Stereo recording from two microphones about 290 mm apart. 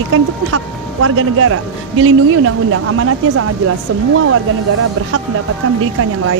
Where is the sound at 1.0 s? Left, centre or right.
Right.